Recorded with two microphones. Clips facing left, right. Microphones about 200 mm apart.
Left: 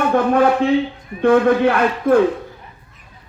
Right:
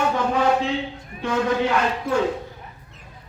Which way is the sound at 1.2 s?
55° left (ahead or behind).